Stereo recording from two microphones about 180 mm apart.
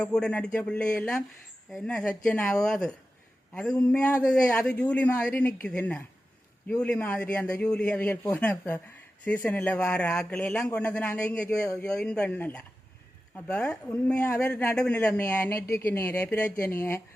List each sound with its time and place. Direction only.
0.0 s speech: 5° left (ahead or behind)
11.9 s speech: 5° left (ahead or behind)